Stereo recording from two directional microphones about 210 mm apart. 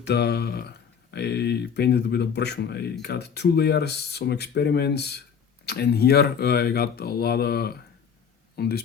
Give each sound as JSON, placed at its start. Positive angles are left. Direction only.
{"t": 0.0, "sound": "speech", "side_deg": 50}